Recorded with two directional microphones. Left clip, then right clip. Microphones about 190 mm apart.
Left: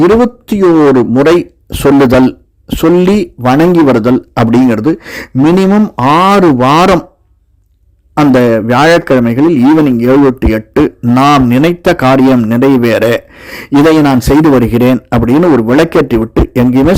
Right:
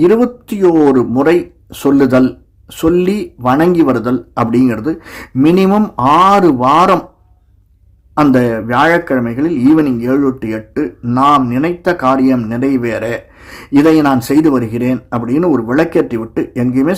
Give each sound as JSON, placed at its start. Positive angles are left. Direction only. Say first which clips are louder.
{"t": 0.5, "sound": "a woman's voice", "louder": "left 3 dB", "side_deg": 40}
{"t": 8.1, "sound": "a man's voice", "louder": "left 4 dB", "side_deg": 45}